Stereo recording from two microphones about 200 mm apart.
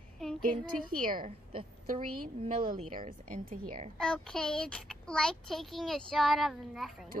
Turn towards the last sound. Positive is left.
turn(degrees=0)  # may be behind; listen again after turning